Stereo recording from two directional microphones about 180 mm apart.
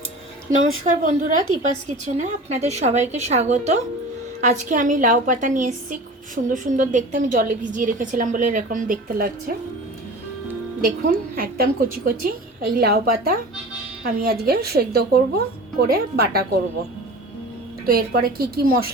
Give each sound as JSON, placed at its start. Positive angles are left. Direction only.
{"t": 0.6, "sound": "a woman's voice", "side_deg": -45}
{"t": 10.8, "sound": "a woman's voice", "side_deg": -50}
{"t": 17.8, "sound": "speech", "side_deg": -55}